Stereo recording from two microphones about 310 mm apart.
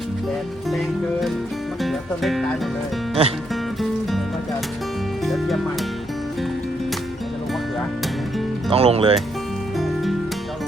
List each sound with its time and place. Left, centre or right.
1.8 s music: centre
3.2 s music: centre
3.5 s music: centre
5.2 s music: centre
8.7 s speech: centre
9.7 s music: centre